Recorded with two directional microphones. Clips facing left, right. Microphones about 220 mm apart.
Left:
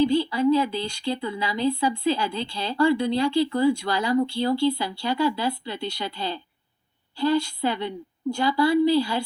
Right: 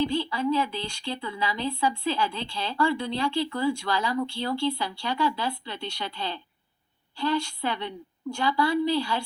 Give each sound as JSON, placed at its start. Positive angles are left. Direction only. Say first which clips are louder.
{"t": 0.0, "sound": "speech", "louder": "left 6 dB", "side_deg": 40}